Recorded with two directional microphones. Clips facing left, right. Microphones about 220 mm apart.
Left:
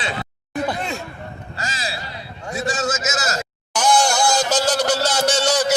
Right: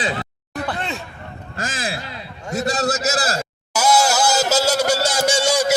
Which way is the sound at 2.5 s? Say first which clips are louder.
Right 2 dB; 40° right (ahead or behind).